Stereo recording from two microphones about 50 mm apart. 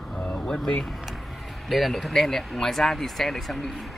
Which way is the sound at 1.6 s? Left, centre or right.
Centre.